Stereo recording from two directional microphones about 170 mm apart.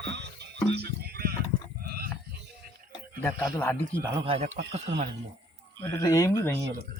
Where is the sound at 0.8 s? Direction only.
70° right (ahead or behind).